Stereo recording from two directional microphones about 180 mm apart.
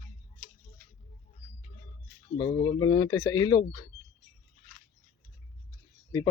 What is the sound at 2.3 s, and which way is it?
Speech, 25° left (ahead or behind).